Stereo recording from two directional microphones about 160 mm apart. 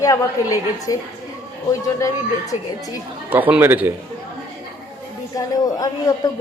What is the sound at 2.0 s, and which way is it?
Speech, 20° left (ahead or behind).